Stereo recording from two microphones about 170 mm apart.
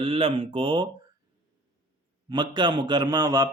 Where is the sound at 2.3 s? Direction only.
25° right (ahead or behind).